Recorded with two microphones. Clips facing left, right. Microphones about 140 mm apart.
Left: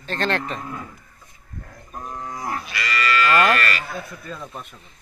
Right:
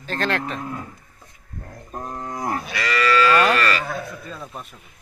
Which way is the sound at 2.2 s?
45° right (ahead or behind).